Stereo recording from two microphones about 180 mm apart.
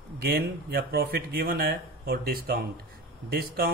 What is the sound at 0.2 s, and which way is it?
Speech, 60° right (ahead or behind).